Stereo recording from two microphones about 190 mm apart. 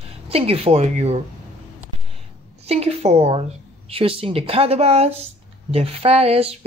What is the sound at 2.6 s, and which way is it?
A woman's voice, 35° right (ahead or behind).